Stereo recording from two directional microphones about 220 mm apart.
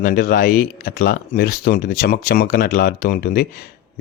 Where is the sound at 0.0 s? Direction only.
45° left (ahead or behind).